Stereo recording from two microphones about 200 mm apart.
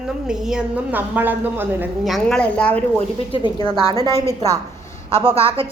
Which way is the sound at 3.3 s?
25° left (ahead or behind).